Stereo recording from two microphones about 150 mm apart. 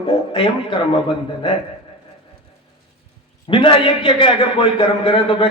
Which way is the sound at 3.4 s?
35° left (ahead or behind).